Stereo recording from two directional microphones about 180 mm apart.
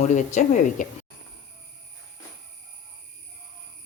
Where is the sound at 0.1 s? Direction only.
40° left (ahead or behind).